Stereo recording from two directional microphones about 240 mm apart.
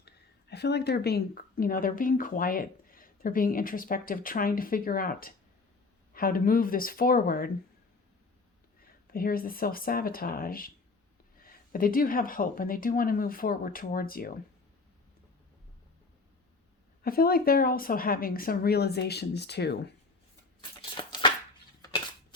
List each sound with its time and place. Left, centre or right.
0.0 s a woman's voice: left
8.8 s speech: left
17.0 s speech: left
20.6 s a sound: centre